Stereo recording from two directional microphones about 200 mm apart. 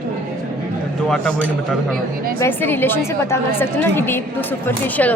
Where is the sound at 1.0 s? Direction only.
5° left (ahead or behind).